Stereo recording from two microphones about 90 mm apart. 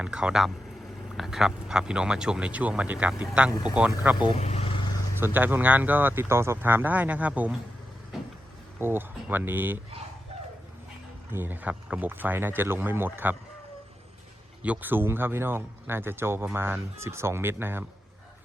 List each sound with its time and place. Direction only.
0.0 s speech: 10° right (ahead or behind)
4.3 s vehicle: 75° left (ahead or behind)
5.2 s speech: 20° right (ahead or behind)
8.8 s speech: 25° right (ahead or behind)
11.3 s speech: 25° right (ahead or behind)
14.6 s speech: 20° right (ahead or behind)